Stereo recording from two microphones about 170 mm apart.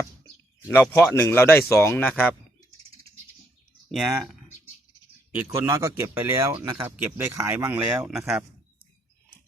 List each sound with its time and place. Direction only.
0.7 s speech: 15° left (ahead or behind)
3.9 s speech: centre (ahead or behind)
5.5 s speech: 20° right (ahead or behind)